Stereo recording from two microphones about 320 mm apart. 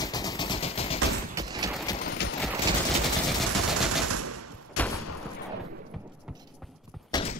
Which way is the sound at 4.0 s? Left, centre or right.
Right.